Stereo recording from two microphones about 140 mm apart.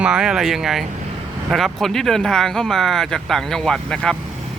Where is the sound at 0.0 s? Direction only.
5° right (ahead or behind).